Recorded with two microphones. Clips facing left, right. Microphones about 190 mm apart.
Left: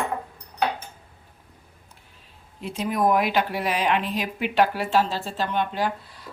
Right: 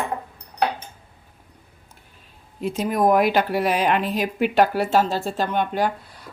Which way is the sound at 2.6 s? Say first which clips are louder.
Right 3 dB; 45° right (ahead or behind).